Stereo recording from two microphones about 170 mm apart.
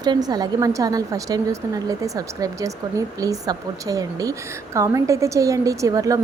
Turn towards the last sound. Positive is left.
turn(degrees=-20)  # may be behind; listen again after turning